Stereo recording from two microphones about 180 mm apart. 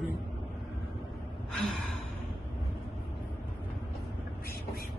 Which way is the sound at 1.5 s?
Centre (ahead or behind).